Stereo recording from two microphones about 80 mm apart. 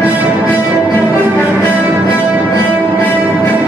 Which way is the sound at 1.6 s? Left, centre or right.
Centre.